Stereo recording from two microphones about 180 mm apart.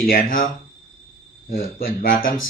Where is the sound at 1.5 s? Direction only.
55° left (ahead or behind).